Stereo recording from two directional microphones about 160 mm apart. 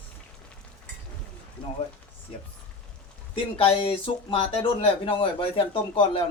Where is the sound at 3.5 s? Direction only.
35° left (ahead or behind).